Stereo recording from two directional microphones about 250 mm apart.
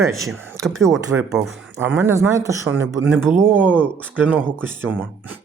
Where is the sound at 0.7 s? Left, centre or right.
Centre.